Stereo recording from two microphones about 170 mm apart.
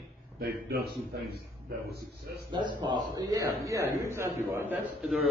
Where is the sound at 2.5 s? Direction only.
25° right (ahead or behind).